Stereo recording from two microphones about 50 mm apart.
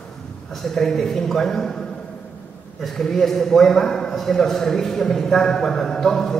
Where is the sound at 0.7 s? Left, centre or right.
Centre.